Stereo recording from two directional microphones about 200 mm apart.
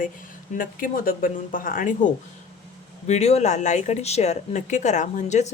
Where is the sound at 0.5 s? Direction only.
45° left (ahead or behind).